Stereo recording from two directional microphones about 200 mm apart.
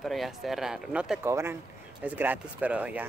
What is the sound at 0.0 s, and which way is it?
Speech, centre (ahead or behind).